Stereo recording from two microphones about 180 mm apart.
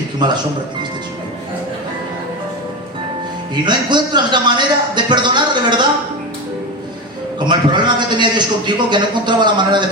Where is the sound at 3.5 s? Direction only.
25° right (ahead or behind).